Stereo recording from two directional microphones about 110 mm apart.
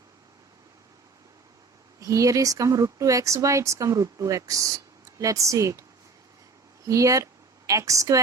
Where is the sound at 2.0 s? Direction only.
30° right (ahead or behind).